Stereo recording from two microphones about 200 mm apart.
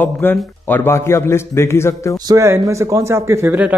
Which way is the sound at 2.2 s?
15° right (ahead or behind).